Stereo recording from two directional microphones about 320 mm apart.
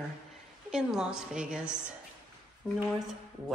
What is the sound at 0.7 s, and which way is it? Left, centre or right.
Speech, centre.